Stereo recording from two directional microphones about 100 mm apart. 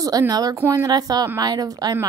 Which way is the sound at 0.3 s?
40° right (ahead or behind).